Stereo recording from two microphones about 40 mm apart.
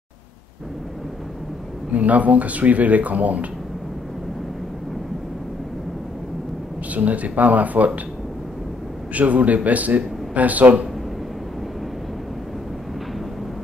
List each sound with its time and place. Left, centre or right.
1.9 s speech: right
6.9 s speech: right
9.1 s speech: right